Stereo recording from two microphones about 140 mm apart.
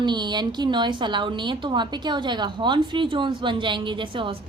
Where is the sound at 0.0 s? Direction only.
30° right (ahead or behind).